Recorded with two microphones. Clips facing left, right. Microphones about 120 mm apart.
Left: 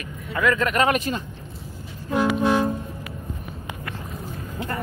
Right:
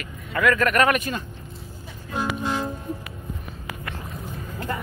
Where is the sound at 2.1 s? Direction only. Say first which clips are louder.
Left 6 dB; 65° left (ahead or behind).